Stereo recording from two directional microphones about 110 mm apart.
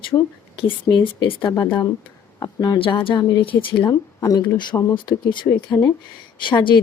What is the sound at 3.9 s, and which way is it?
Speech, 35° left (ahead or behind).